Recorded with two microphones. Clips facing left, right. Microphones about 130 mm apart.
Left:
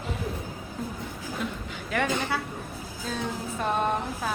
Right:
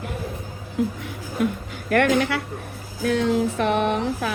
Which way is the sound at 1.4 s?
55° right (ahead or behind).